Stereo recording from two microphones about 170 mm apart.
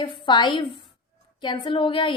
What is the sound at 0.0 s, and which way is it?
A woman's voice, 30° left (ahead or behind).